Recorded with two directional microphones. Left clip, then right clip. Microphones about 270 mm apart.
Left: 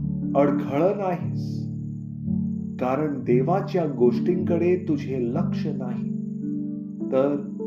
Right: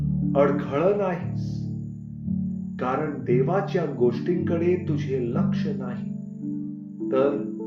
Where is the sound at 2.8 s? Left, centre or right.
Left.